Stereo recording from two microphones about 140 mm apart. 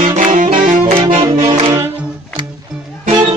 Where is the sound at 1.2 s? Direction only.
45° right (ahead or behind).